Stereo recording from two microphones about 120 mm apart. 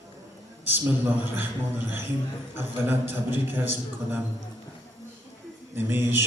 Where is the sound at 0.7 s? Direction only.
15° right (ahead or behind).